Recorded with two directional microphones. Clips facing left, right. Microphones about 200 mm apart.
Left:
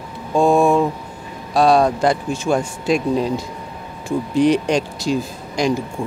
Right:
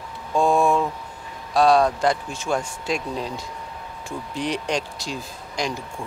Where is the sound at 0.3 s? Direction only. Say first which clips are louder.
Left 5 dB; 40° left (ahead or behind).